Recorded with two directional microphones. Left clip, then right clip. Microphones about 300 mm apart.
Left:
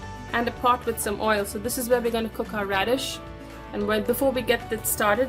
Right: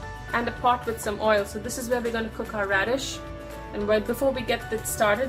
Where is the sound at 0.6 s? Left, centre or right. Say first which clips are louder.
Left 1 dB; left.